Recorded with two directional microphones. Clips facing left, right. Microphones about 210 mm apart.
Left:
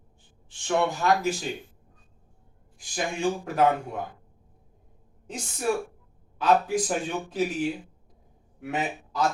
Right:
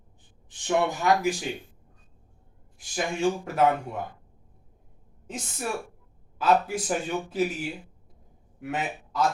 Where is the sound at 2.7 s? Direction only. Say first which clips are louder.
Right 1 dB; 5° right (ahead or behind).